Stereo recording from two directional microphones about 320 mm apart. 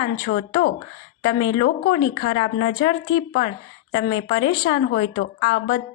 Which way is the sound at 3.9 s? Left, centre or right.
Left.